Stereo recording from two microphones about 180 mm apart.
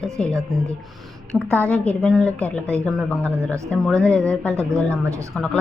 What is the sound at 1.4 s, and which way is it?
Speech, 15° right (ahead or behind).